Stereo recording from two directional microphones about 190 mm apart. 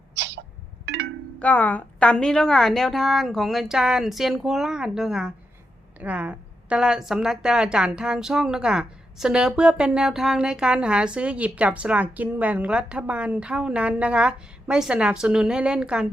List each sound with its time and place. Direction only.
0.2 s music: 65° right (ahead or behind)
1.4 s a woman's voice: 10° left (ahead or behind)